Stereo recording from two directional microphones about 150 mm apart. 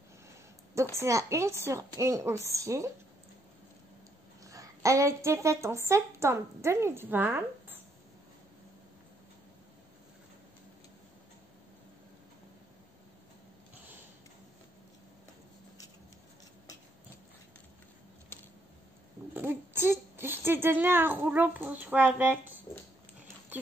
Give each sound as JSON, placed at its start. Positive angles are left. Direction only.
{"t": 0.9, "sound": "a woman's voice", "side_deg": -20}
{"t": 4.5, "sound": "a woman's voice", "side_deg": -20}
{"t": 19.3, "sound": "speech", "side_deg": -15}